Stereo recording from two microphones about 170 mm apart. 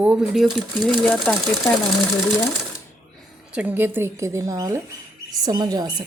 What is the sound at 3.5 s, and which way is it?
A woman's voice, 10° right (ahead or behind).